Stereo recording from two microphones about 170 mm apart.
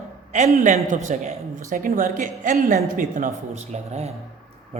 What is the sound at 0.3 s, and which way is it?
Speech, 45° right (ahead or behind).